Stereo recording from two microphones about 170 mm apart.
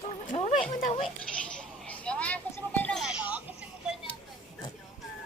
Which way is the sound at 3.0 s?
5° right (ahead or behind).